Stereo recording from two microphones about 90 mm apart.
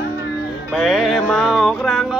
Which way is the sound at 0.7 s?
Centre (ahead or behind).